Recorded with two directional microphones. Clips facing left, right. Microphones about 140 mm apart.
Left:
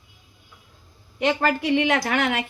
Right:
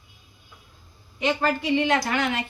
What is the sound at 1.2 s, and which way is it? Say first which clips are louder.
A woman's voice: left 2 dB; 65° left (ahead or behind).